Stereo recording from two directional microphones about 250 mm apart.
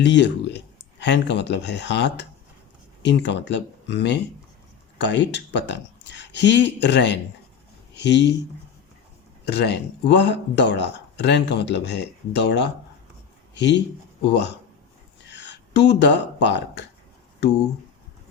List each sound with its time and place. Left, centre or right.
0.0 s speech: left
9.5 s speech: left
15.3 s a sound: left